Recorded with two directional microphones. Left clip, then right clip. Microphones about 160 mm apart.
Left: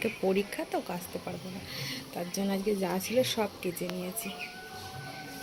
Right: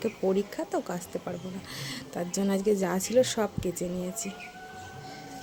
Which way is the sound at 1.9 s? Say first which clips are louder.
Right 5 dB; 50° right (ahead or behind).